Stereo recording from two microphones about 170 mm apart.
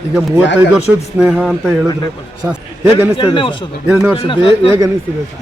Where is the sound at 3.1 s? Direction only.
30° left (ahead or behind).